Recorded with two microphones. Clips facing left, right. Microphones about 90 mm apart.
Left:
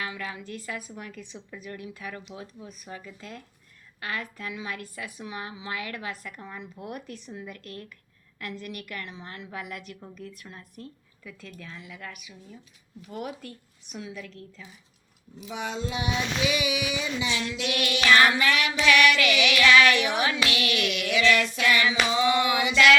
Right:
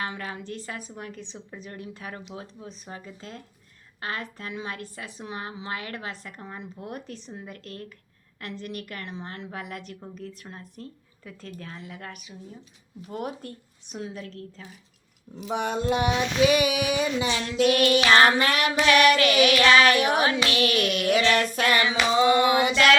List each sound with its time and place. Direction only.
0.0 s a woman's voice: 40° right (ahead or behind)
0.4 s a woman's voice: 30° right (ahead or behind)
15.4 s a sound: 55° right (ahead or behind)
20.4 s a woman's voice: 35° right (ahead or behind)
22.1 s a sound: 40° right (ahead or behind)
22.7 s a woman's voice: 40° right (ahead or behind)